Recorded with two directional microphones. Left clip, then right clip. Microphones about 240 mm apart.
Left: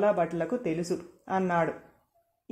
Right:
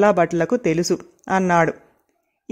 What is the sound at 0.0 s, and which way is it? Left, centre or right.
Speech, right.